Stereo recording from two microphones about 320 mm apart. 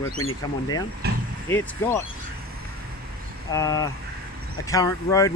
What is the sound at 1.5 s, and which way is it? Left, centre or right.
Speech, centre.